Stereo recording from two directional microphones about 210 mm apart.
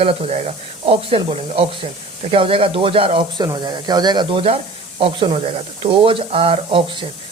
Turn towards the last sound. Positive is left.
turn(degrees=-25)  # may be behind; listen again after turning